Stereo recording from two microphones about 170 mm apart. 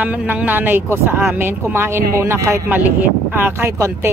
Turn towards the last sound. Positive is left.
turn(degrees=-15)  # may be behind; listen again after turning